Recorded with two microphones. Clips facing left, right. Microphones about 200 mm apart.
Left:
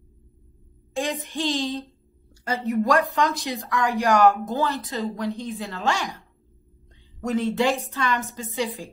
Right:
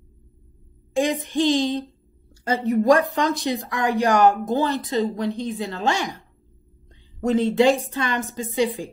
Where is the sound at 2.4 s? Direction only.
20° right (ahead or behind).